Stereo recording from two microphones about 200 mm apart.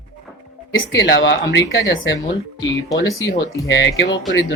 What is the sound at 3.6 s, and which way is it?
Speech, 65° left (ahead or behind).